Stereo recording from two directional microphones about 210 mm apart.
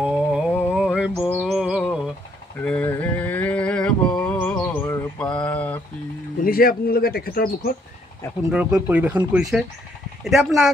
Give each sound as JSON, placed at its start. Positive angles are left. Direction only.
{"t": 0.0, "sound": "a sound", "side_deg": -5}
{"t": 4.2, "sound": "music", "side_deg": 5}
{"t": 6.4, "sound": "speech", "side_deg": 45}
{"t": 8.5, "sound": "speech", "side_deg": -5}